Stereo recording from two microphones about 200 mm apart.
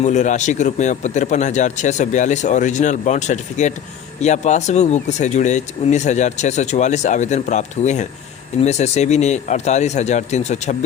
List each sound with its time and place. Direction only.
0.0 s speech: 35° left (ahead or behind)